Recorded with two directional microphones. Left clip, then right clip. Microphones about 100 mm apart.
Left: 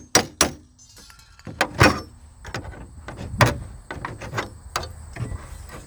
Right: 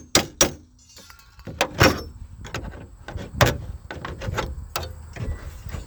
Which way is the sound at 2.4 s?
25° left (ahead or behind).